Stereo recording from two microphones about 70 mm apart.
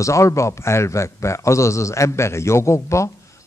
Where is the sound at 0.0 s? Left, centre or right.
Left.